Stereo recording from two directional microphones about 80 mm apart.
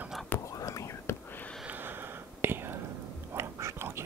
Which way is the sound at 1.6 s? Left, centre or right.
Right.